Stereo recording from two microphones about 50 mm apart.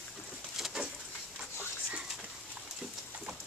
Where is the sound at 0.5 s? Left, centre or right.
Centre.